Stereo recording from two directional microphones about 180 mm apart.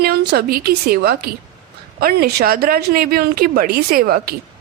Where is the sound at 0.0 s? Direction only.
60° right (ahead or behind).